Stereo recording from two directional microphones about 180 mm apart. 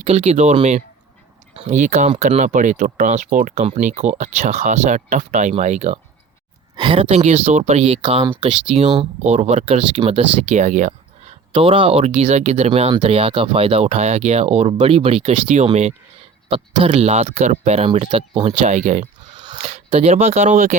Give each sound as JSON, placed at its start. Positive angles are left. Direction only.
{"t": 0.0, "sound": "speech", "side_deg": -35}
{"t": 3.6, "sound": "speech", "side_deg": -40}
{"t": 8.4, "sound": "speech", "side_deg": -35}